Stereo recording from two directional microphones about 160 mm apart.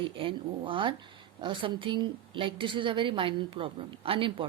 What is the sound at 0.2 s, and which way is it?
A woman's voice, 35° right (ahead or behind).